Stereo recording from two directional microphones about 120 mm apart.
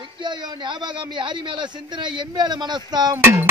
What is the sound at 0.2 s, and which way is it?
A man's voice, 40° right (ahead or behind).